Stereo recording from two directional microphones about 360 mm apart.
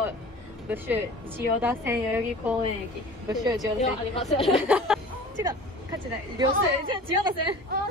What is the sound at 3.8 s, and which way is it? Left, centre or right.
Speech, centre.